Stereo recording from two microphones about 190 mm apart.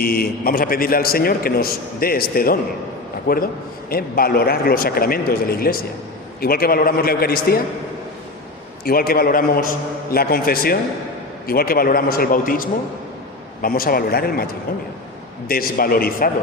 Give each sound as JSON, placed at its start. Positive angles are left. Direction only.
{"t": 0.0, "sound": "a man's voice", "side_deg": 50}
{"t": 8.8, "sound": "a man's voice", "side_deg": 50}
{"t": 15.4, "sound": "a man's voice", "side_deg": 50}